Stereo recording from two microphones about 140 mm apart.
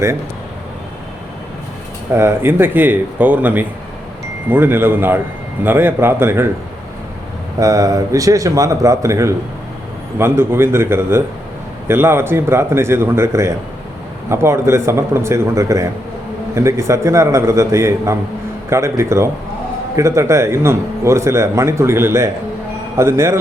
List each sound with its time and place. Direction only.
2.1 s speech: 15° right (ahead or behind)
7.6 s a man's voice: 25° right (ahead or behind)